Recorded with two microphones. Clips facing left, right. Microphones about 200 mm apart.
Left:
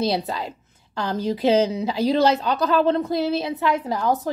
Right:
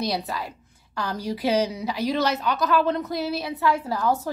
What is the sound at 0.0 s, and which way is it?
A woman's voice, 25° left (ahead or behind).